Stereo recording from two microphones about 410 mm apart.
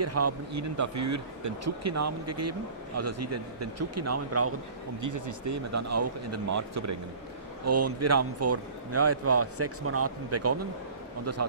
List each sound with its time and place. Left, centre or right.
0.0 s a man's voice: right
5.0 s a man's voice: right